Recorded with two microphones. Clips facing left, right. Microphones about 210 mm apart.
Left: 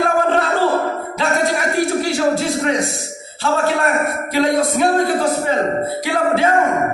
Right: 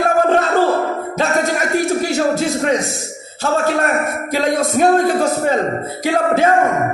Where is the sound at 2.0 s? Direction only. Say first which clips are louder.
Even; 45° right (ahead or behind).